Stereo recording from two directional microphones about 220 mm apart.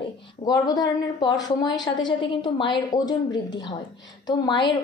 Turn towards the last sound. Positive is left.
turn(degrees=20)  # may be behind; listen again after turning